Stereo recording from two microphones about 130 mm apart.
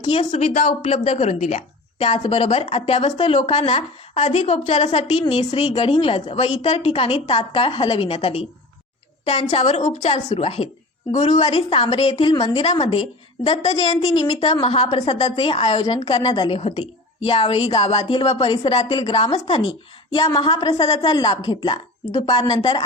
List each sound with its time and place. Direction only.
0.3 s speech: 60° left (ahead or behind)
0.8 s a woman's voice: 50° left (ahead or behind)
9.5 s a woman's voice: 55° left (ahead or behind)
11.1 s a woman's voice: 60° left (ahead or behind)
11.4 s a woman's voice: 45° left (ahead or behind)
14.6 s a woman's voice: 45° left (ahead or behind)
16.6 s a woman's voice: 50° left (ahead or behind)
20.2 s a woman's voice: 30° left (ahead or behind)